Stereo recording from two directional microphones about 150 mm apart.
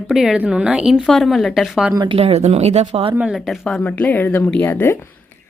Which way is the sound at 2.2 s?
45° right (ahead or behind).